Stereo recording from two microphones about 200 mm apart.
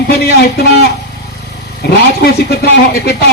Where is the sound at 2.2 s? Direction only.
55° left (ahead or behind).